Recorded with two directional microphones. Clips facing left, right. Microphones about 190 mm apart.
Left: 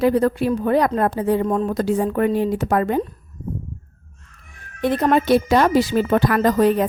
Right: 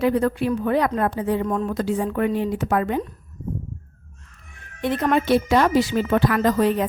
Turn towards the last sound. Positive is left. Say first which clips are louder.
# left 3 dB
turn(degrees=45)  # may be behind; listen again after turning